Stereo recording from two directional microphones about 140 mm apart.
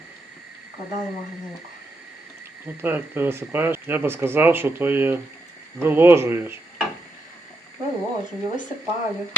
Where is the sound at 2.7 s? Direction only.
15° right (ahead or behind).